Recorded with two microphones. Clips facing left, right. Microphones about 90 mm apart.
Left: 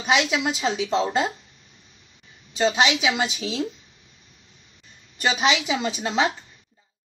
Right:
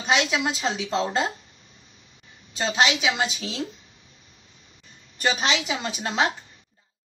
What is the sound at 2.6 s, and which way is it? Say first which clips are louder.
Speech: left 2 dB; 5° left (ahead or behind).